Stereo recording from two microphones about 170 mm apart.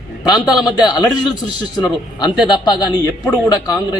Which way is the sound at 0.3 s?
5° right (ahead or behind).